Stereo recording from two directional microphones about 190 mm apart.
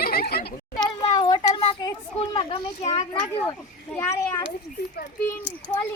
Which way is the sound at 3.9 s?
15° left (ahead or behind).